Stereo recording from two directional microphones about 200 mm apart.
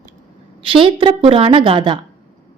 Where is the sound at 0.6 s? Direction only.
25° right (ahead or behind).